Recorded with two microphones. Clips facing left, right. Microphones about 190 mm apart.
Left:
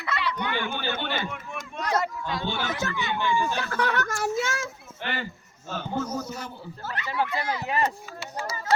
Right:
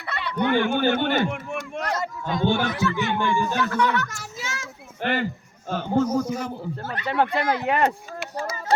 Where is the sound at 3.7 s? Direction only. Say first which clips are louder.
Right 3 dB; 55° left (ahead or behind).